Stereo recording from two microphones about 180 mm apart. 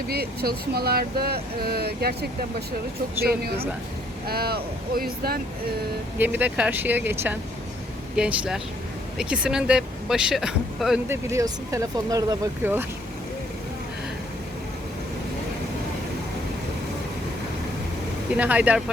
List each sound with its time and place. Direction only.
0.1 s speech: 60° right (ahead or behind)
4.3 s speech: 60° right (ahead or behind)
6.1 s speech: 10° right (ahead or behind)
11.1 s speech: 15° right (ahead or behind)
18.3 s speech: 10° right (ahead or behind)